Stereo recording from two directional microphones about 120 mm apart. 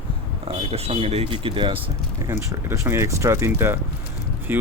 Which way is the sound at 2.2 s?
25° right (ahead or behind).